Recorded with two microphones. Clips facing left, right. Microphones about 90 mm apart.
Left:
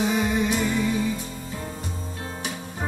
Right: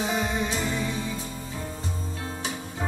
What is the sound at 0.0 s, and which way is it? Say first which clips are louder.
Music: left 4 dB; 30° right (ahead or behind).